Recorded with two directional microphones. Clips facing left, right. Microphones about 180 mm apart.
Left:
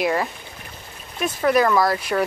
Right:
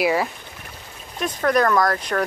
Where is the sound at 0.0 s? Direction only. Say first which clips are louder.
Right 1 dB; centre (ahead or behind).